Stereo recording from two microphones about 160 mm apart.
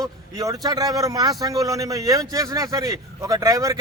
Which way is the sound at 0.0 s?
25° right (ahead or behind).